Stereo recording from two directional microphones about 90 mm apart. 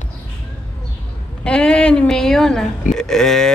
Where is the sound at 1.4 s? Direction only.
10° left (ahead or behind).